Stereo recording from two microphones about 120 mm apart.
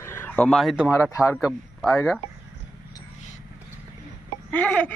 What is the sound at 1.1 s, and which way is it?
Speech, 25° left (ahead or behind).